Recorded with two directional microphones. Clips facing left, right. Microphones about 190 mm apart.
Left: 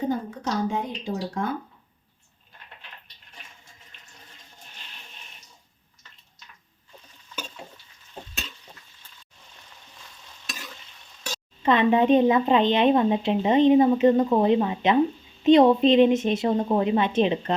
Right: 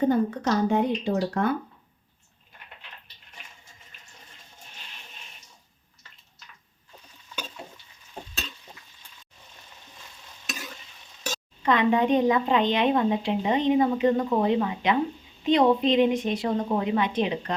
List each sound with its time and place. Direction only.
0.1 s speech: 60° right (ahead or behind)
11.6 s speech: 25° left (ahead or behind)